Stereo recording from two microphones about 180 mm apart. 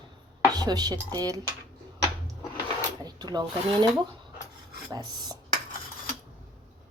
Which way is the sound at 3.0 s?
25° right (ahead or behind).